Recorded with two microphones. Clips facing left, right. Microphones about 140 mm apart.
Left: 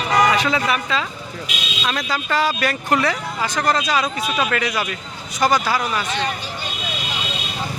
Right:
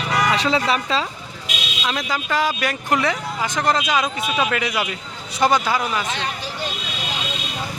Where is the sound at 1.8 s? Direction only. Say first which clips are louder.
Left 1 dB; 15° right (ahead or behind).